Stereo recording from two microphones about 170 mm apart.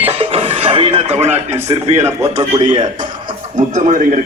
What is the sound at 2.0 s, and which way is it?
Speech, 20° right (ahead or behind).